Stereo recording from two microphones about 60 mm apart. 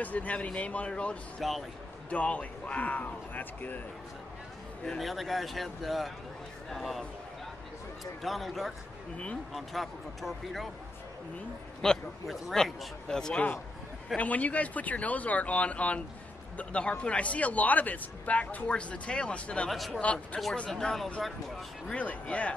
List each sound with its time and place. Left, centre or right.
0.0 s speech: left
1.4 s speech: centre
2.0 s speech: left
4.8 s speech: centre
11.8 s speech: centre
12.3 s speech: centre
13.1 s speech: centre
14.1 s speech: left; by 21.1 s centre
21.8 s speech: left